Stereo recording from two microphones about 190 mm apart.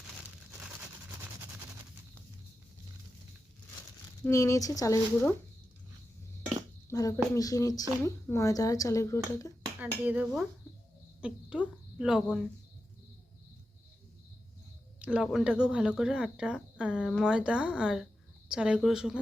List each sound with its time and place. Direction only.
4.3 s speech: 15° left (ahead or behind)
6.8 s speech: 15° left (ahead or behind)
9.8 s speech: 10° right (ahead or behind)
14.9 s speech: 5° right (ahead or behind)